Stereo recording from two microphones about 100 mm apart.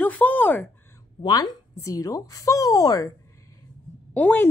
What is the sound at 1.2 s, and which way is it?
A woman's voice, 40° left (ahead or behind).